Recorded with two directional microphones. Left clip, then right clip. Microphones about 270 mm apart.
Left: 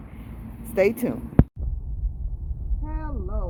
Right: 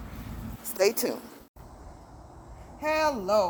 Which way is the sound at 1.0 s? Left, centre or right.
Centre.